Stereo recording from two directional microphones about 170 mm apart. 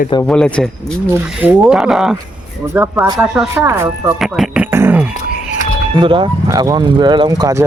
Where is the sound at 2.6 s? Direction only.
15° right (ahead or behind).